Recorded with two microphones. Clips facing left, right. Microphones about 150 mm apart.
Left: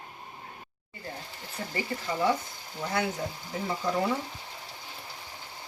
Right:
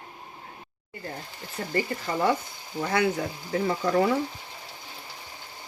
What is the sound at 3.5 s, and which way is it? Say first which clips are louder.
Speech: right 6 dB; 90° right.